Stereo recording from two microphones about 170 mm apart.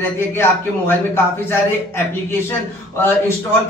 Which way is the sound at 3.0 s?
15° left (ahead or behind).